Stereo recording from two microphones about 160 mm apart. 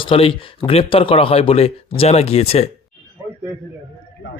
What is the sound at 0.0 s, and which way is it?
Speech, 35° left (ahead or behind).